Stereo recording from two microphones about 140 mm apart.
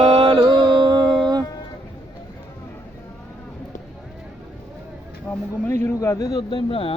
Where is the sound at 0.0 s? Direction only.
35° right (ahead or behind).